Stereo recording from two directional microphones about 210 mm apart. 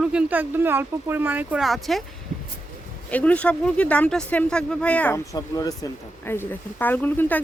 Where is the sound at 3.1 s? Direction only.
5° left (ahead or behind).